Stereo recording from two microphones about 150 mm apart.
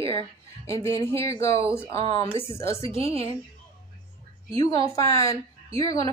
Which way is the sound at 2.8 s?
40° right (ahead or behind).